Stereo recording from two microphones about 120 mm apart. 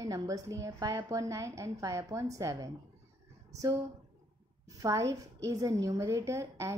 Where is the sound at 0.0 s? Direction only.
30° right (ahead or behind).